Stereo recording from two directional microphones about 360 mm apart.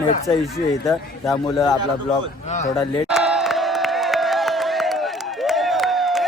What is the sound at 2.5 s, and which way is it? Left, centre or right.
Speech, centre.